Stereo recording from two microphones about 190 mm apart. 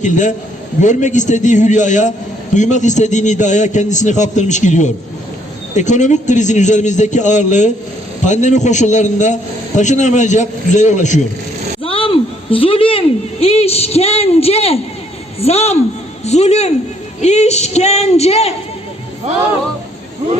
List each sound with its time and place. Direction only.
0.0 s a man's voice: 40° left (ahead or behind)
11.8 s a woman's voice: 30° left (ahead or behind)